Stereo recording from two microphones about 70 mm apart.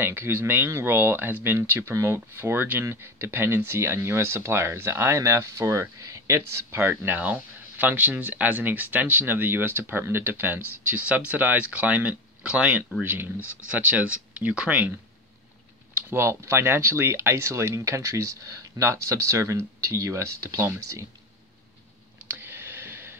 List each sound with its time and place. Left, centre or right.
0.0 s speech: right
16.1 s speech: right
22.3 s a sound: right